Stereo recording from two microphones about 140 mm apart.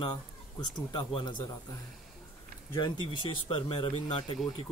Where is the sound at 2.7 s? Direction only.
35° left (ahead or behind).